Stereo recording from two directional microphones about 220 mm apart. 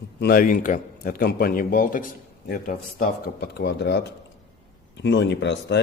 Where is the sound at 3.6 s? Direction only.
50° left (ahead or behind).